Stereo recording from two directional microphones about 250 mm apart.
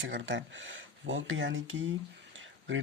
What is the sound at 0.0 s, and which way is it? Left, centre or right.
Speech, right.